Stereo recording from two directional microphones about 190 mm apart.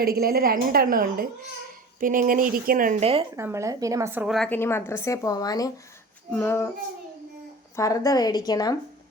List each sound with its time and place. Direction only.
0.0 s a woman's voice: 55° right (ahead or behind)
3.0 s speech: 30° right (ahead or behind)
3.3 s a woman's voice: 15° right (ahead or behind); by 5.7 s 20° left (ahead or behind)
6.3 s child singing: 15° left (ahead or behind)
7.8 s a woman's voice: 15° left (ahead or behind)